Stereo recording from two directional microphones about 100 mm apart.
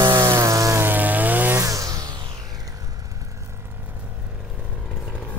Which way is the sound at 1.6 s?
35° right (ahead or behind).